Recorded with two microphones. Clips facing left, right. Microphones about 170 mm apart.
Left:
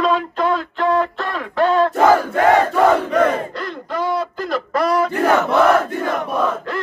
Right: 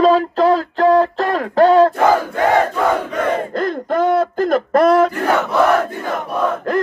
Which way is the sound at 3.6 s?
50° right (ahead or behind).